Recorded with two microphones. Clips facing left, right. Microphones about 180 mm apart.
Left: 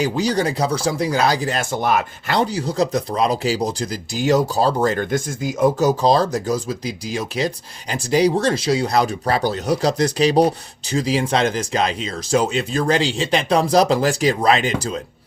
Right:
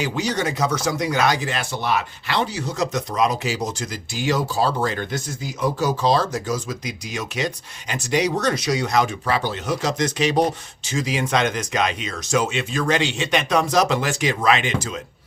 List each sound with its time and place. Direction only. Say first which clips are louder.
0.0 s speech: left 4 dB; 35° left (ahead or behind)